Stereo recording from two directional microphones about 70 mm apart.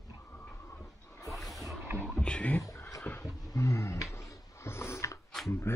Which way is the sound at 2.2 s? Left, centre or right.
Centre.